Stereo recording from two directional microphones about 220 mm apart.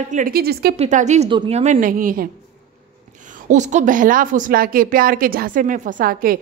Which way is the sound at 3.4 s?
30° right (ahead or behind).